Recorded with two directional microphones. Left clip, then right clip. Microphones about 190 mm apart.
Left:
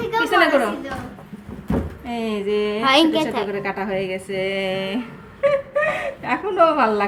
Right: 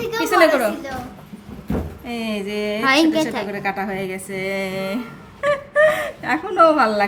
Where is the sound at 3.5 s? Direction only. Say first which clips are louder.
Even; 30° right (ahead or behind).